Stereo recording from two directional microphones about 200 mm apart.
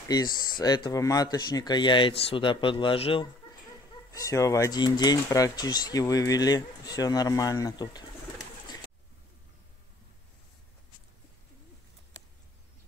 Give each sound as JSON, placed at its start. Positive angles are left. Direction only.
{"t": 0.1, "sound": "speech", "side_deg": 20}
{"t": 4.1, "sound": "speech", "side_deg": 15}